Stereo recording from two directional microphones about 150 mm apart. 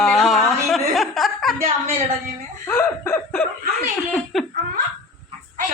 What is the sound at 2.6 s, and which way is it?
Snicker, 15° left (ahead or behind).